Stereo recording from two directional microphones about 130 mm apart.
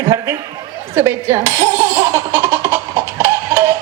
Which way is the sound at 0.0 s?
20° right (ahead or behind).